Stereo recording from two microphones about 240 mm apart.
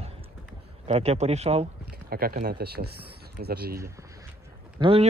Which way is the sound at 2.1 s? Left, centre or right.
Right.